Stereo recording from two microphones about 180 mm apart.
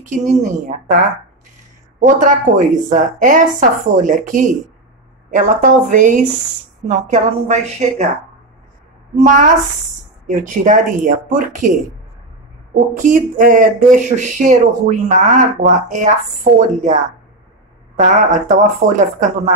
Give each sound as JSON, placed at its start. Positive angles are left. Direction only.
{"t": 0.0, "sound": "speech", "side_deg": -45}
{"t": 2.0, "sound": "a woman's voice", "side_deg": -45}
{"t": 9.1, "sound": "speech", "side_deg": -40}
{"t": 13.0, "sound": "speech", "side_deg": -45}